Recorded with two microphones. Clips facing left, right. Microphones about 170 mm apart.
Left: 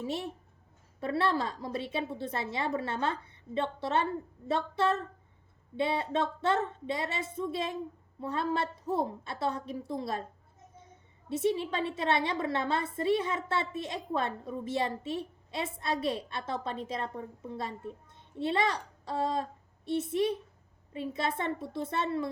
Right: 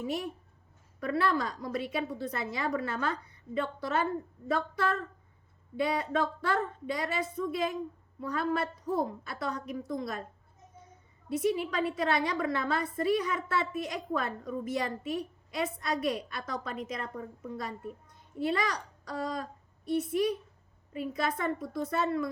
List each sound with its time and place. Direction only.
0.0 s a woman's voice: 25° left (ahead or behind)
11.3 s a woman's voice: 25° left (ahead or behind)